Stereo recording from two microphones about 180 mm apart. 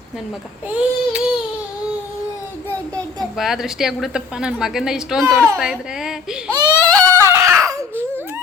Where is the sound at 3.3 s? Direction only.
Centre (ahead or behind).